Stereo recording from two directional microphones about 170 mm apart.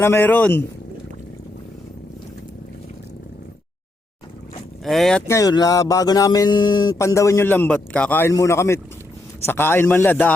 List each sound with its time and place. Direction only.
0.0 s a man's voice: 10° left (ahead or behind)
4.8 s speech: centre (ahead or behind)
5.3 s a sound: 20° left (ahead or behind)
9.5 s a man's voice: 15° left (ahead or behind)